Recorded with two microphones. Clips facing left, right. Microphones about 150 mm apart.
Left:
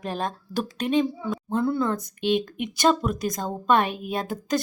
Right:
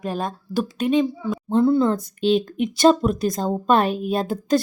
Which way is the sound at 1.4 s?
25° right (ahead or behind).